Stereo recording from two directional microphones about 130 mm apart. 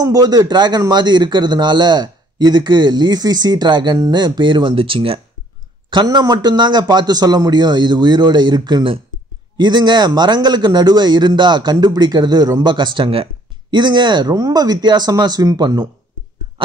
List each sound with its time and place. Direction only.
0.0 s a man's voice: 30° right (ahead or behind)